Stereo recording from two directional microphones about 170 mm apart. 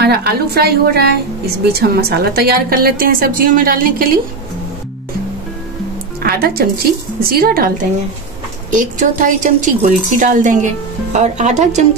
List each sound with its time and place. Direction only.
0.0 s a woman's voice: 70° right (ahead or behind)
6.2 s a woman's voice: 65° right (ahead or behind); by 11.8 s 45° right (ahead or behind)